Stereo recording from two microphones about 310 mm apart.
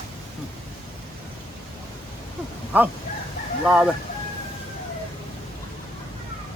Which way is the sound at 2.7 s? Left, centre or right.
Centre.